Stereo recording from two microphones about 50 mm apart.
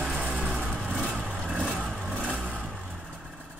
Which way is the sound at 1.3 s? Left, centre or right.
Centre.